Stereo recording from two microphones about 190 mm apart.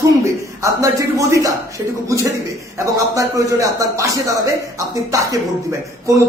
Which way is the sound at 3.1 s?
15° right (ahead or behind).